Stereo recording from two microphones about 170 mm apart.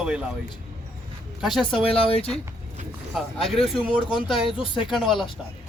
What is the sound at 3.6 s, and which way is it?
Speech, 30° left (ahead or behind).